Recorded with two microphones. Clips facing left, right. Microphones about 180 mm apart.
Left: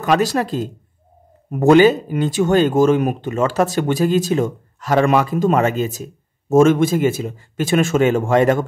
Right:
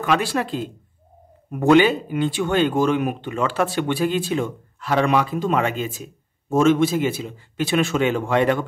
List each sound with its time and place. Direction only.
0.0 s a man's voice: 40° left (ahead or behind)